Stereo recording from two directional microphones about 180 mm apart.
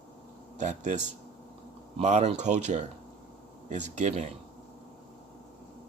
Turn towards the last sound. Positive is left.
turn(degrees=-40)  # may be behind; listen again after turning